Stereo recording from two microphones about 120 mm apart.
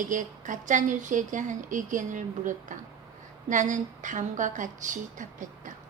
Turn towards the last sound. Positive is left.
turn(degrees=-90)